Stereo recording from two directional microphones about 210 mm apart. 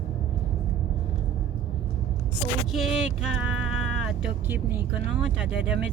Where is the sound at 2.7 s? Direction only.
Centre (ahead or behind).